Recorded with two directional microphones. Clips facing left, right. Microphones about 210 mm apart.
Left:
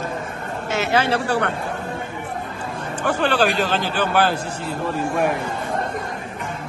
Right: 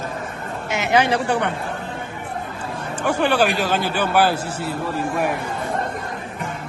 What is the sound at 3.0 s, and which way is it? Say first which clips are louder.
Speech: right 1 dB; 10° right (ahead or behind).